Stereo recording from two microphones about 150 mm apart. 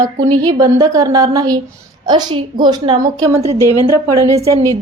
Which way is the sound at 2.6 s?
30° right (ahead or behind).